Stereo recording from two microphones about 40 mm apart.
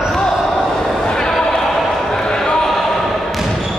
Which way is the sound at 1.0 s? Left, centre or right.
Centre.